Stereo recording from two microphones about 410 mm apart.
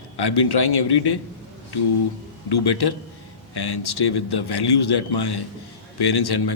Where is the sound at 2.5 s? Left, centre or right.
Left.